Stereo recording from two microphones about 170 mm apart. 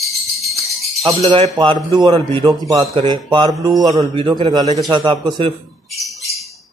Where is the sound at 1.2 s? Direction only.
35° right (ahead or behind).